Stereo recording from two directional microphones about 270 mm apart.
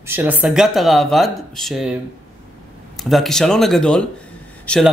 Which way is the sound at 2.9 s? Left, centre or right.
Centre.